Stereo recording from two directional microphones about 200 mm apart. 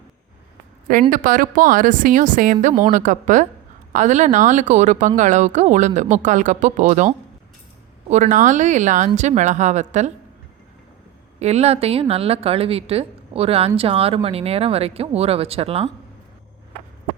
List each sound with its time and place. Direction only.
1.1 s speech: 45° right (ahead or behind)
8.1 s speech: 40° right (ahead or behind)
11.3 s a woman's voice: 30° right (ahead or behind)